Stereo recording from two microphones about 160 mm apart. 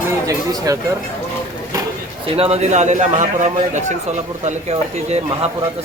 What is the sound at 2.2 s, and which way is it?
A man's voice, 40° right (ahead or behind).